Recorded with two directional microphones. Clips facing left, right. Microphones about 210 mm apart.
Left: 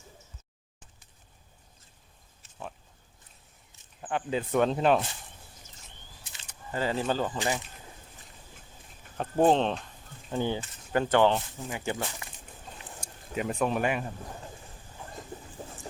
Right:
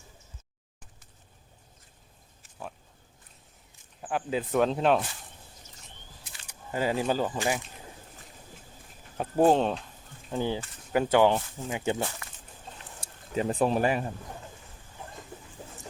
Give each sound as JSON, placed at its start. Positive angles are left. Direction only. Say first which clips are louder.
{"t": 4.0, "sound": "speech", "louder": "even", "side_deg": -5}
{"t": 6.5, "sound": "speech", "louder": "right 2 dB", "side_deg": -10}
{"t": 9.1, "sound": "speech", "louder": "right 1 dB", "side_deg": -10}
{"t": 11.7, "sound": "speech", "louder": "right 4 dB", "side_deg": -20}
{"t": 13.0, "sound": "speech", "louder": "right 3 dB", "side_deg": -35}